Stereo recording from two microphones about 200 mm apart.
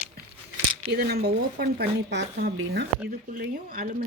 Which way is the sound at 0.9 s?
50° right (ahead or behind).